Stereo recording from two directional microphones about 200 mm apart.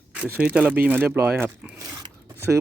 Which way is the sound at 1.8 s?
20° right (ahead or behind).